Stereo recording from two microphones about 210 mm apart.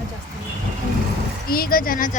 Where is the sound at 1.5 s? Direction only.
45° left (ahead or behind).